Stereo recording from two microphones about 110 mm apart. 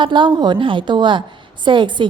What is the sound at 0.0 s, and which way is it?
A woman's voice, 45° right (ahead or behind).